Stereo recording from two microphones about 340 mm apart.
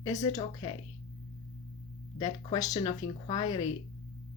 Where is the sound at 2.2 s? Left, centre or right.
Centre.